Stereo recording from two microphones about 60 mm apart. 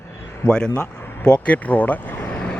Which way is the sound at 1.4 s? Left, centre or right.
Left.